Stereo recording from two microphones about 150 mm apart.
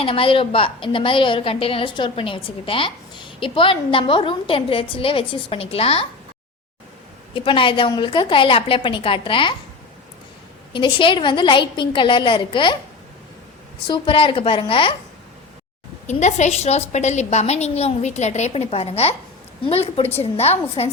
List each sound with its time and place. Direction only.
0.0 s a woman's voice: 35° left (ahead or behind)
7.3 s a woman's voice: 35° left (ahead or behind)
10.7 s a woman's voice: 30° left (ahead or behind)
13.8 s a woman's voice: 35° left (ahead or behind)
16.0 s a woman's voice: 50° left (ahead or behind)